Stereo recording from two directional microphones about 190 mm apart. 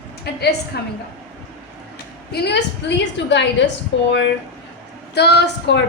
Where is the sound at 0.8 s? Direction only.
60° left (ahead or behind).